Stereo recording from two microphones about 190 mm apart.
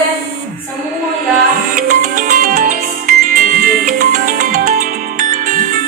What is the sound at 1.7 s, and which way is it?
Music, 45° right (ahead or behind).